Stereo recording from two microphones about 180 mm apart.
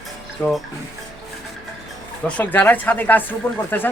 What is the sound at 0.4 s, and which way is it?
Speech, 5° left (ahead or behind).